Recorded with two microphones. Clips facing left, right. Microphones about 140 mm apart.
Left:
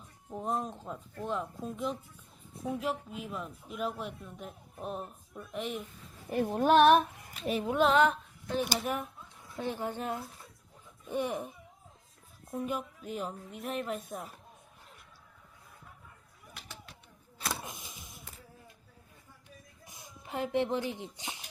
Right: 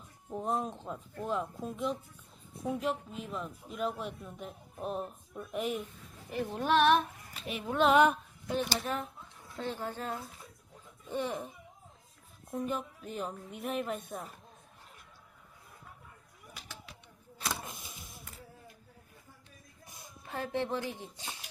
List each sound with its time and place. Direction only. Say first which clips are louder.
0.3 s speech: right 1 dB; centre (ahead or behind)
6.3 s speech: left 5 dB; 45° left (ahead or behind)
7.9 s a sound: right 1 dB; 15° right (ahead or behind)
8.5 s speech: left 1 dB; 15° left (ahead or behind)
17.4 s a sound: even; 10° left (ahead or behind)
20.2 s speech: left 4 dB; 15° left (ahead or behind)